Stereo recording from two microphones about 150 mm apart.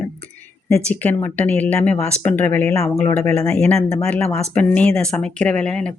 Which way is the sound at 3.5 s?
5° left (ahead or behind).